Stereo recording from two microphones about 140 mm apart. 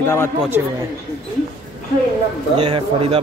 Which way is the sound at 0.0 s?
15° left (ahead or behind).